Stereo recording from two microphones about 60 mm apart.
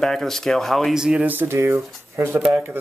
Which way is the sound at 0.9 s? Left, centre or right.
Centre.